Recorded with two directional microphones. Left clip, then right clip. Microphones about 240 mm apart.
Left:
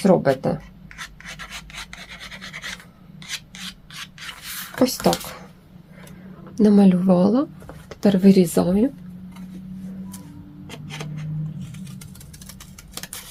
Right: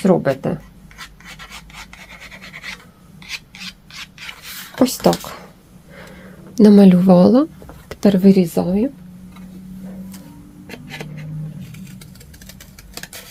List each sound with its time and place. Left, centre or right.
0.0 s speech: right
0.9 s filing: centre
3.2 s rub: centre
5.0 s speech: right
6.5 s speech: right
7.9 s a sound: right
8.2 s speech: centre
10.7 s a sound: centre